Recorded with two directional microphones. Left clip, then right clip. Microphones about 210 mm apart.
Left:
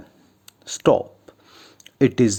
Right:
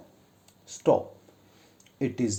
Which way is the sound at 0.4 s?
35° left (ahead or behind).